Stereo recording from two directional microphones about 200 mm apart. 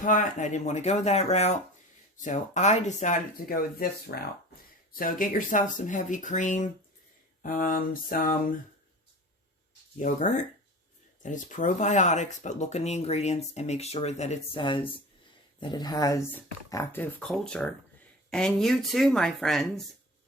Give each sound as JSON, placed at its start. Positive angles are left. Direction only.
{"t": 0.0, "sound": "speech", "side_deg": 40}
{"t": 7.4, "sound": "a sound", "side_deg": 40}
{"t": 10.0, "sound": "speech", "side_deg": 40}